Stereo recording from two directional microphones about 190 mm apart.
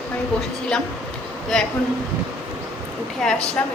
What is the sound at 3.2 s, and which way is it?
Speech, centre (ahead or behind).